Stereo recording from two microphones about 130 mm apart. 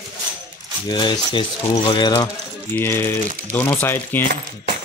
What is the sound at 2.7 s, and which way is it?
Speech, 15° left (ahead or behind).